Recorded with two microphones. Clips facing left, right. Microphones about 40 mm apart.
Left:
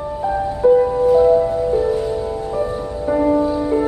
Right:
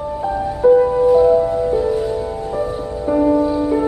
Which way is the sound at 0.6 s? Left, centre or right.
Centre.